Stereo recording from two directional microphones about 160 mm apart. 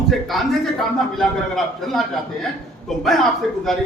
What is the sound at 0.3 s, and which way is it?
A man's voice, centre (ahead or behind).